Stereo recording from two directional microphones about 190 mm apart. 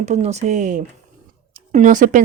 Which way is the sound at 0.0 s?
35° right (ahead or behind).